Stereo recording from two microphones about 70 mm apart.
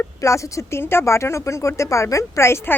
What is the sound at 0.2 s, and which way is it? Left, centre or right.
Speech, left.